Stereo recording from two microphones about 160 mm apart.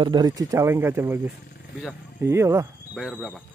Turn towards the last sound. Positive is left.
turn(degrees=0)  # may be behind; listen again after turning